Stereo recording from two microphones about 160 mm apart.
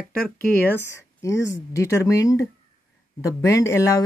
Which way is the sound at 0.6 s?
15° left (ahead or behind).